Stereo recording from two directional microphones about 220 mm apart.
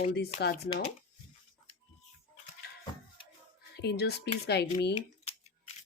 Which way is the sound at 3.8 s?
50° left (ahead or behind).